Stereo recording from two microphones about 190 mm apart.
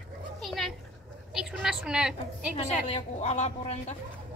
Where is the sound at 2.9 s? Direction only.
35° left (ahead or behind).